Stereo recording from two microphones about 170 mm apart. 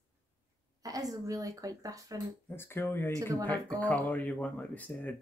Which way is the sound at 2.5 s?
15° left (ahead or behind).